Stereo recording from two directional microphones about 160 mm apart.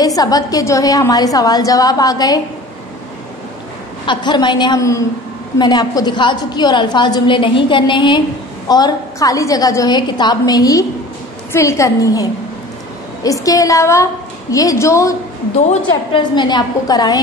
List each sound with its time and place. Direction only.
0.0 s a woman's voice: 25° left (ahead or behind)
4.0 s a woman's voice: 30° left (ahead or behind)
15.9 s a woman's voice: 30° left (ahead or behind)